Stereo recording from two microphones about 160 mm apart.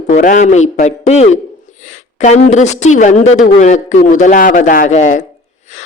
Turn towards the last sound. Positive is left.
turn(degrees=50)  # may be behind; listen again after turning